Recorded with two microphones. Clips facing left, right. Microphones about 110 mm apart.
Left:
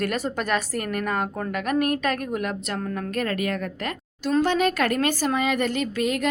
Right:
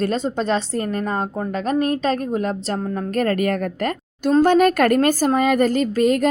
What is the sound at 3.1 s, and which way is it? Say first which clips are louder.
A woman's voice: right 7 dB; 40° right (ahead or behind).